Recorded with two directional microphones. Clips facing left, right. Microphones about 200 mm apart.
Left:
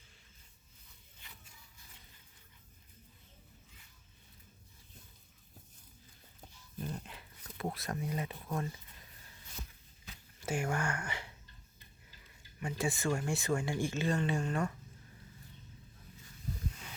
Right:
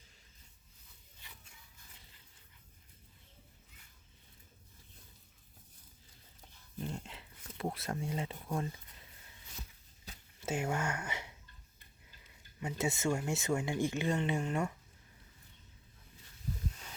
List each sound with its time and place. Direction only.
6.7 s dog: 25° right (ahead or behind)
7.6 s speech: 30° right (ahead or behind)
10.4 s speech: 20° right (ahead or behind)
12.5 s speech: 20° right (ahead or behind)